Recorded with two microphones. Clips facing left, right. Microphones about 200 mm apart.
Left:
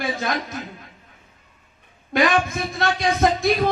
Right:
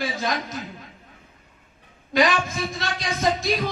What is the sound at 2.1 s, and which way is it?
Speech, 55° left (ahead or behind).